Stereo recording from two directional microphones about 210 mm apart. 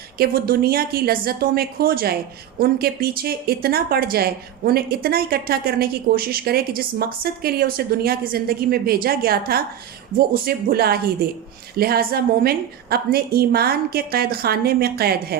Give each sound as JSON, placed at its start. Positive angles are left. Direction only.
{"t": 0.2, "sound": "speech", "side_deg": -45}